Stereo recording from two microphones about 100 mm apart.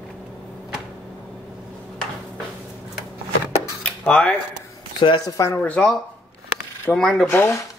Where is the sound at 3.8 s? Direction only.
10° left (ahead or behind).